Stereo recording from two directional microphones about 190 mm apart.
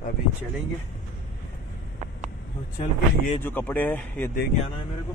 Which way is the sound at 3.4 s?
10° left (ahead or behind).